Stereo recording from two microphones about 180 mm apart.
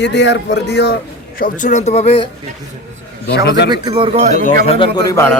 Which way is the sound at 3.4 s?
70° left (ahead or behind).